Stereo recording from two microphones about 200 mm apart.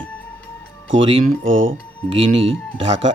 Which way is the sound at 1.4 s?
75° right (ahead or behind).